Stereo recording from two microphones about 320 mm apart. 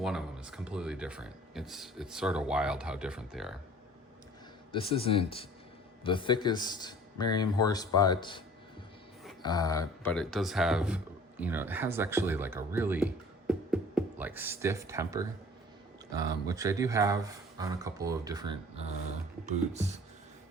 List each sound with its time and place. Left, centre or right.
0.0 s speech: centre
4.7 s a man's voice: centre; by 20.0 s right